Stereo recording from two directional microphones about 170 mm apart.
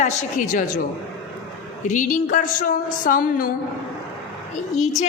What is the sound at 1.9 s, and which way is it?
A woman's voice, 50° left (ahead or behind).